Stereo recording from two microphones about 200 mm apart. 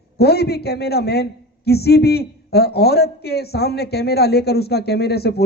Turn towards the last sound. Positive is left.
turn(degrees=55)  # may be behind; listen again after turning